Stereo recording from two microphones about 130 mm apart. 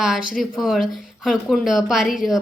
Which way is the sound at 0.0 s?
5° right (ahead or behind).